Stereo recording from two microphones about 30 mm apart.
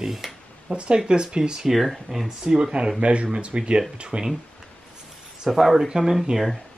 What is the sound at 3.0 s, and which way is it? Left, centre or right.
Speech, right.